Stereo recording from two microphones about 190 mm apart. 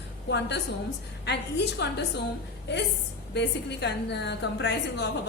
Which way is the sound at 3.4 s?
65° left (ahead or behind).